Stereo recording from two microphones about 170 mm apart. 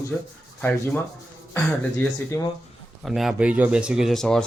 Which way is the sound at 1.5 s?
10° left (ahead or behind).